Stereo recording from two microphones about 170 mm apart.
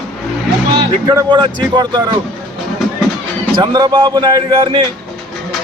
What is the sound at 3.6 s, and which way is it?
A man's voice, 25° right (ahead or behind).